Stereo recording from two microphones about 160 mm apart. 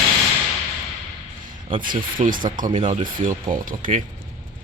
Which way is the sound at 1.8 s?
60° right (ahead or behind).